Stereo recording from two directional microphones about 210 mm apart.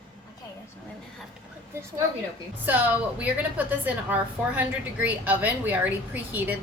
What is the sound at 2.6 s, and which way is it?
A woman's voice, 10° right (ahead or behind).